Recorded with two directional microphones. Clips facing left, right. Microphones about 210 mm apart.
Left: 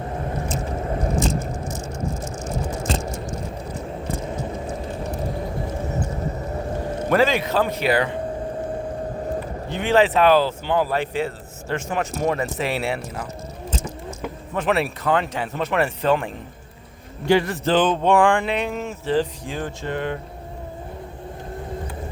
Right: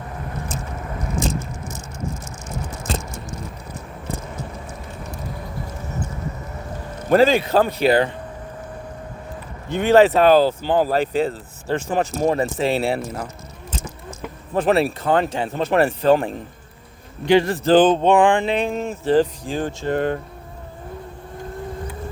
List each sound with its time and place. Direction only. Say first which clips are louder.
0.8 s biting: left 5 dB; 30° left (ahead or behind)
7.1 s speech: right 4 dB; 30° right (ahead or behind)
9.7 s speech: right 4 dB; 40° right (ahead or behind)
14.5 s speech: right 4 dB; 35° right (ahead or behind)
18.1 s speech: right 2 dB; 20° right (ahead or behind)
19.9 s speech: right 6 dB; 40° right (ahead or behind)